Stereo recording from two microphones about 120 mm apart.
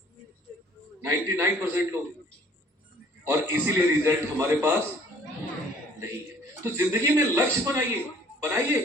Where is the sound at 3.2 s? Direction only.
20° right (ahead or behind).